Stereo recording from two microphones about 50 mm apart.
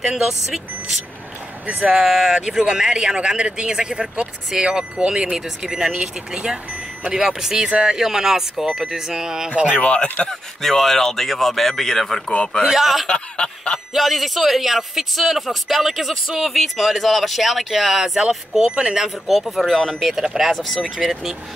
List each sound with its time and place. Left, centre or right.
1.7 s speech: centre
2.6 s speech: centre
8.0 s speech: centre
9.7 s speech: left
10.2 s speech: centre
12.3 s speech: centre
12.6 s speech: centre
13.0 s speech: centre
13.9 s speech: centre